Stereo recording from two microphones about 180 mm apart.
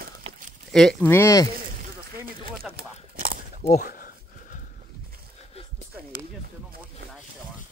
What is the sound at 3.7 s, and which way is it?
Speech, 50° left (ahead or behind).